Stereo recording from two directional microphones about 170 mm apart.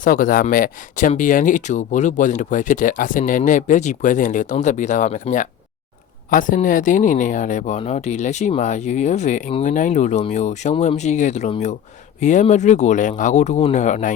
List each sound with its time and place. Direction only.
0.0 s speech: 55° left (ahead or behind)